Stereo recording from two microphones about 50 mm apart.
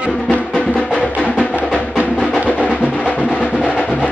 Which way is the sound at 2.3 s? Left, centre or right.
Left.